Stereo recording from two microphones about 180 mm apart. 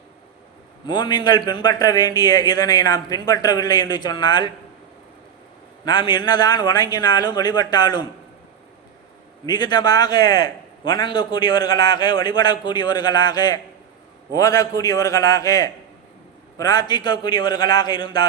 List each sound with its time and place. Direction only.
0.9 s a man's voice: 25° left (ahead or behind)
5.8 s a man's voice: 25° left (ahead or behind)
9.5 s a man's voice: 25° left (ahead or behind)